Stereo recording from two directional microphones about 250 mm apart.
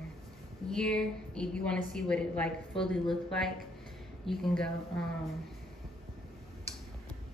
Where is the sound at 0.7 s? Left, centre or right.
Centre.